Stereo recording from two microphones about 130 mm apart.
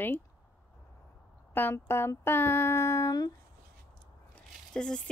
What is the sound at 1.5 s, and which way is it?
Speech, 15° left (ahead or behind).